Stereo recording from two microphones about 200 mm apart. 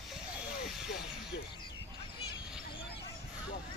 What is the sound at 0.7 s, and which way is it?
Vehicle, 5° right (ahead or behind).